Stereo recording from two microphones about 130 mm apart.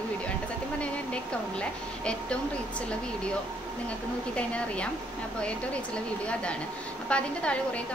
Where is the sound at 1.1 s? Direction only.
10° left (ahead or behind).